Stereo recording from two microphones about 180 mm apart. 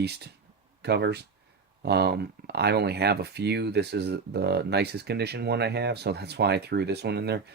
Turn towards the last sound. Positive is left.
turn(degrees=-65)  # may be behind; listen again after turning